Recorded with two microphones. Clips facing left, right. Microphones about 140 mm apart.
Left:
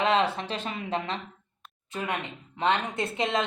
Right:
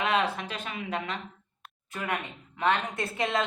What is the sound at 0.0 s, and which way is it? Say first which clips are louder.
Speech: left 3 dB; 30° left (ahead or behind).